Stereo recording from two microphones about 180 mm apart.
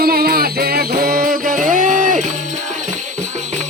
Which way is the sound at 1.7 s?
50° right (ahead or behind).